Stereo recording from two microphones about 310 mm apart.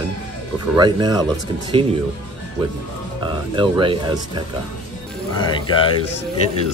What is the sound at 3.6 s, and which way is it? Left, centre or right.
Speech, centre.